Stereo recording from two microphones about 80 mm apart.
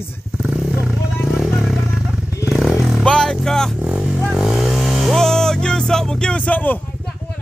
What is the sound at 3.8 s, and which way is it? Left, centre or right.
Vehicle, centre.